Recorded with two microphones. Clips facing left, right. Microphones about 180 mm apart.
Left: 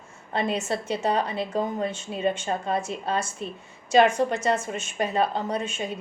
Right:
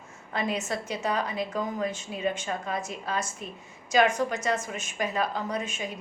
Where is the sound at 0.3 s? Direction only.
30° left (ahead or behind).